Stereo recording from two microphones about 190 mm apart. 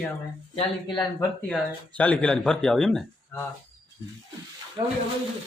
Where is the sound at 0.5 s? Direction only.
25° left (ahead or behind).